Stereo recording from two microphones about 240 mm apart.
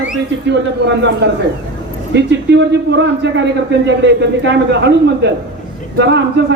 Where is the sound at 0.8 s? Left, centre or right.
Right.